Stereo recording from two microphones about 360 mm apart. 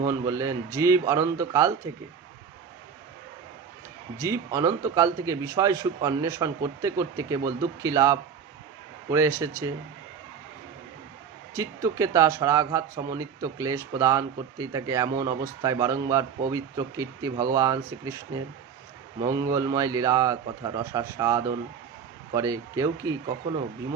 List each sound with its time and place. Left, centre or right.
0.0 s speech: centre
4.2 s speech: centre
11.5 s speech: centre